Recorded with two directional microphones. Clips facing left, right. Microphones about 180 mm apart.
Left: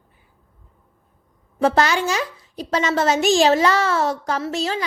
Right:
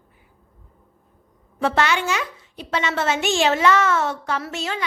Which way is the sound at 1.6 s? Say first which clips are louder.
Left 3 dB; 40° left (ahead or behind).